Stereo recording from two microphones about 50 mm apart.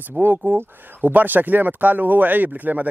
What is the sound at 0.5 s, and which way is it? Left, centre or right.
Speech, right.